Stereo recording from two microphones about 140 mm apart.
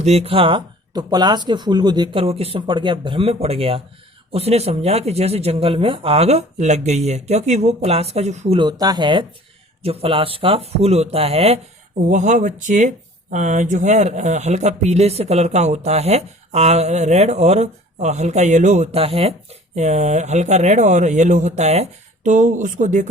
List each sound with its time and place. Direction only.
0.0 s speech: 50° right (ahead or behind); by 2.2 s 30° right (ahead or behind)
2.2 s speech: 45° right (ahead or behind)
8.5 s speech: 30° right (ahead or behind)
9.8 s speech: 45° right (ahead or behind)
12.0 s speech: 60° right (ahead or behind)